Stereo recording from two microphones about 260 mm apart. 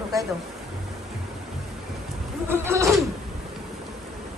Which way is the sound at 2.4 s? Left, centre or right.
Centre.